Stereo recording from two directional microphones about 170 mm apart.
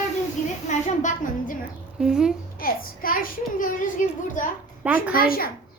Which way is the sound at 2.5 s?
60° left (ahead or behind).